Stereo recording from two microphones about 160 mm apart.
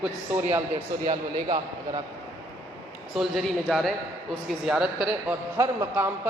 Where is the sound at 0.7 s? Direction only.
35° right (ahead or behind).